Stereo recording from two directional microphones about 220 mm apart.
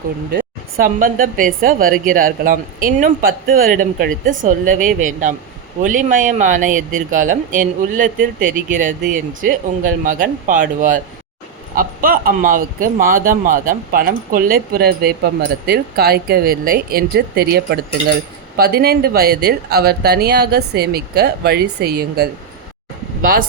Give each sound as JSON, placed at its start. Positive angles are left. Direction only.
{"t": 0.3, "sound": "a man's voice", "side_deg": -40}